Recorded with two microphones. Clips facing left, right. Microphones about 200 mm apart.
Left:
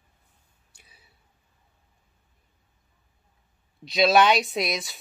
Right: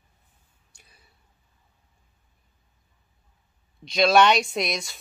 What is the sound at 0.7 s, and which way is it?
Whispering, 5° left (ahead or behind).